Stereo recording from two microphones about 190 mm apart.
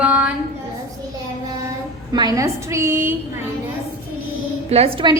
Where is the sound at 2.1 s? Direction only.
20° right (ahead or behind).